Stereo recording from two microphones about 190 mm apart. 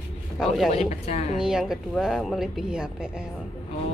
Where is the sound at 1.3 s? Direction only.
5° right (ahead or behind).